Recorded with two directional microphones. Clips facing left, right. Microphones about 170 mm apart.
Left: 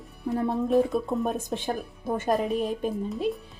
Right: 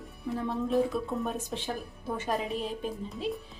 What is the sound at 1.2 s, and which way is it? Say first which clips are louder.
A woman's voice: left 5 dB; 45° left (ahead or behind).